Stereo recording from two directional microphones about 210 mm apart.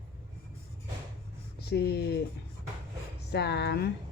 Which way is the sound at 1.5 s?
50° left (ahead or behind).